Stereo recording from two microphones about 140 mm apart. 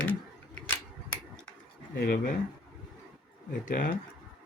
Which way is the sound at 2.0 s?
90° left.